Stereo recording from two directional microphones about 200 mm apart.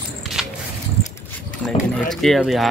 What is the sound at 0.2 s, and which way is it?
Walk, centre (ahead or behind).